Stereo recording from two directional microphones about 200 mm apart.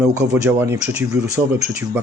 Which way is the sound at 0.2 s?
5° right (ahead or behind).